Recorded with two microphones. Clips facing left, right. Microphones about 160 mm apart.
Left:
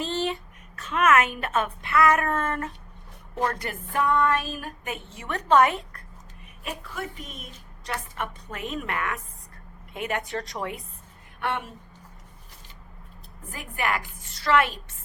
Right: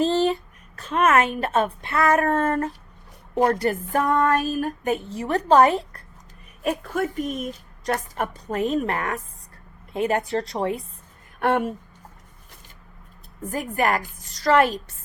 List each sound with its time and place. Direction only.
0.0 s a sound: 35° right (ahead or behind)
0.8 s speech: 35° right (ahead or behind)
6.6 s a woman's voice: 45° right (ahead or behind)
11.3 s a woman's voice: 45° right (ahead or behind)
13.5 s speech: 40° right (ahead or behind)